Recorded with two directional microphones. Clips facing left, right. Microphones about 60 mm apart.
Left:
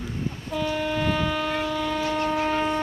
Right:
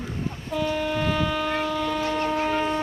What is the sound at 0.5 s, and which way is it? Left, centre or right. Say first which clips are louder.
Train: right 1 dB; centre.